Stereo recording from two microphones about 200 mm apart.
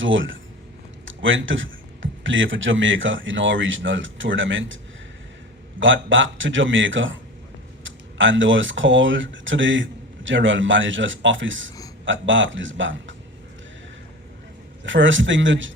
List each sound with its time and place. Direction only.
0.0 s speech: 70° right (ahead or behind)
5.8 s speech: 70° right (ahead or behind)
14.8 s speech: 70° right (ahead or behind)